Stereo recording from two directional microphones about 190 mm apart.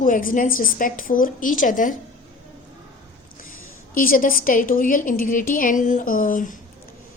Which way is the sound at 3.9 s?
45° left (ahead or behind).